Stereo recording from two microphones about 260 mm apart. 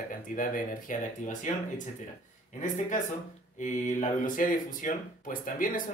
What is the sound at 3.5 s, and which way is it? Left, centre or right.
Speech, left.